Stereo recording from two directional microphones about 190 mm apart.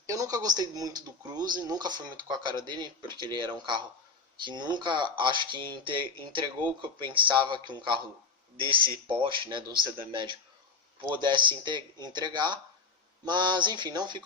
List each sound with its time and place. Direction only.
0.1 s speech: 20° right (ahead or behind)
9.0 s speech: 25° right (ahead or behind)